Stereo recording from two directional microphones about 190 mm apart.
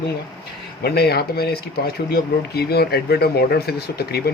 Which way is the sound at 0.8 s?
55° left (ahead or behind).